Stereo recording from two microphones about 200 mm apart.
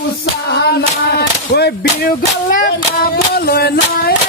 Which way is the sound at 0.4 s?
55° left (ahead or behind).